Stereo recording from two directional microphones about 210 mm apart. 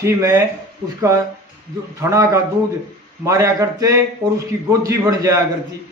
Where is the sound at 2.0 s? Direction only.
15° right (ahead or behind).